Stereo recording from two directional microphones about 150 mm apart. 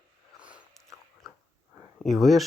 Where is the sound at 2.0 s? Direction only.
Centre (ahead or behind).